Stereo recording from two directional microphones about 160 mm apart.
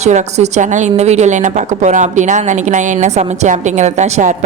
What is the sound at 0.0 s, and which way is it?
A woman's voice, 45° right (ahead or behind).